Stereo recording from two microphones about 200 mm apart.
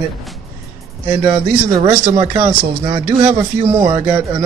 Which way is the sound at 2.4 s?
15° right (ahead or behind).